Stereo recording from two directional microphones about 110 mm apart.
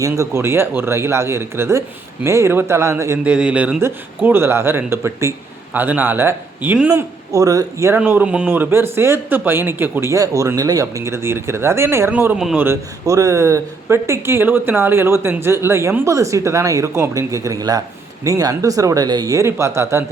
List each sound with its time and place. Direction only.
0.0 s speech: 25° right (ahead or behind)
3.2 s speech: 10° right (ahead or behind)
6.9 s speech: 30° right (ahead or behind)
7.9 s speech: 15° right (ahead or behind)